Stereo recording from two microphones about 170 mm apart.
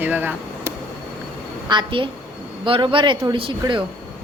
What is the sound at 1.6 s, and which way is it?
A woman's voice, 30° right (ahead or behind).